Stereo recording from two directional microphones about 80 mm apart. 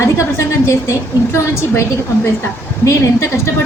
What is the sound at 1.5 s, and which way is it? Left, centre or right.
Speech, left.